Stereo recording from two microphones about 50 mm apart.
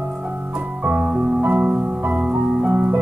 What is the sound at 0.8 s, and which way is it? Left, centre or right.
Music, right.